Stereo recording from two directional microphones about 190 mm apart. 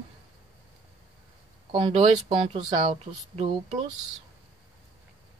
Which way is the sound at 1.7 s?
30° right (ahead or behind).